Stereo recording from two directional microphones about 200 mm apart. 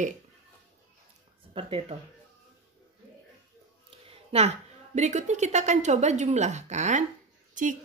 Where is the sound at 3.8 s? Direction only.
30° right (ahead or behind).